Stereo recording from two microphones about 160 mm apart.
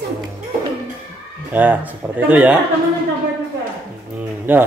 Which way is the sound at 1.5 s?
10° right (ahead or behind).